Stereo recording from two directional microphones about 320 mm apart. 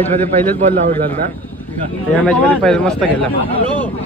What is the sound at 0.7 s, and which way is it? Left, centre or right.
Speech, right.